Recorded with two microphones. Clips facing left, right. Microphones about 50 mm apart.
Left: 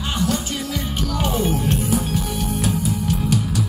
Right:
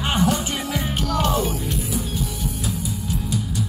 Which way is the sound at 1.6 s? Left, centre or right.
Left.